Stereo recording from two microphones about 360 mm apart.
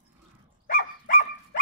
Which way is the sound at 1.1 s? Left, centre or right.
Left.